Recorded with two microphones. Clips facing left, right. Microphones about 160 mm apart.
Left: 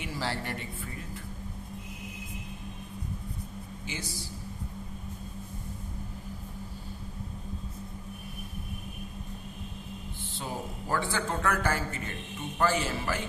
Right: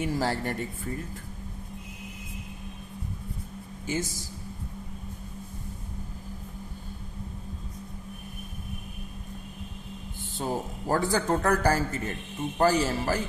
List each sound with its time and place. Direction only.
0.0 s speech: 45° right (ahead or behind)
3.8 s speech: 45° right (ahead or behind)
10.3 s a man's voice: 40° right (ahead or behind)